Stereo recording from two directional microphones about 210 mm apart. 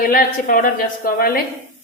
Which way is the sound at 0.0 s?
40° left (ahead or behind).